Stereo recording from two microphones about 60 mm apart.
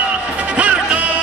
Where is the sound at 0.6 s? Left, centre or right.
Right.